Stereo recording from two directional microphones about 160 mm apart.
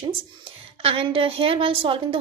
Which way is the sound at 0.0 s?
35° right (ahead or behind).